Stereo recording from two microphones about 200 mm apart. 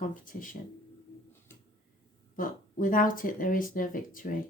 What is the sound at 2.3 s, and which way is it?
Speech, 45° left (ahead or behind).